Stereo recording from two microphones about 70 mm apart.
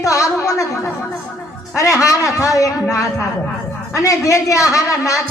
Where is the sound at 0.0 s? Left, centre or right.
Left.